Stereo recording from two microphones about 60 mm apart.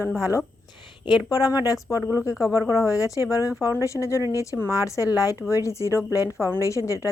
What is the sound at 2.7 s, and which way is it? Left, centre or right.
Speech, left.